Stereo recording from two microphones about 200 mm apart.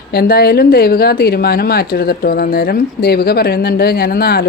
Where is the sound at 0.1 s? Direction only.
50° left (ahead or behind).